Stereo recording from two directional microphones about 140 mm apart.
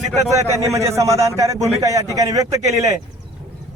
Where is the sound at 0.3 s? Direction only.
25° right (ahead or behind).